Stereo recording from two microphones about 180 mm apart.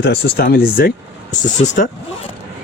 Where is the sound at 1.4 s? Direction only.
40° left (ahead or behind).